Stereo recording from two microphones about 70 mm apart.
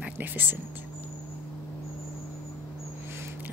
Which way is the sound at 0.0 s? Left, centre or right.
Right.